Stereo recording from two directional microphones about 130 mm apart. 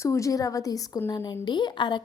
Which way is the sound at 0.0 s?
25° left (ahead or behind).